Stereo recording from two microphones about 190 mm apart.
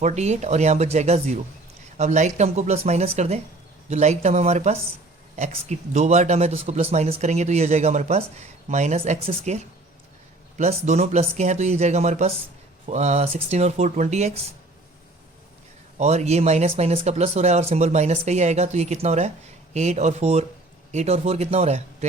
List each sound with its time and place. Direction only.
0.0 s speech: 35° right (ahead or behind)
16.0 s speech: 35° right (ahead or behind)